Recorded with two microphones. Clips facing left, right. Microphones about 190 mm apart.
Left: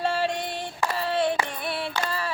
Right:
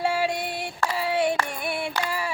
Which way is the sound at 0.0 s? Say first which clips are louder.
Right 1 dB; 10° right (ahead or behind).